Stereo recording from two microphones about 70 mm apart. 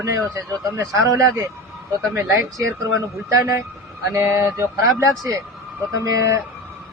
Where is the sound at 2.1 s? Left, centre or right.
Right.